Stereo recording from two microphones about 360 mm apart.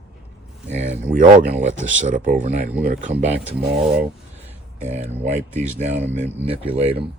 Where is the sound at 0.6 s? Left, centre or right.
Centre.